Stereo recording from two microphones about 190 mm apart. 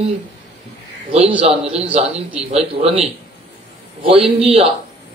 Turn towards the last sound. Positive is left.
turn(degrees=-30)  # may be behind; listen again after turning